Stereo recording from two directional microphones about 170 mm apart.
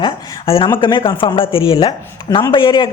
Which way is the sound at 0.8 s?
30° left (ahead or behind).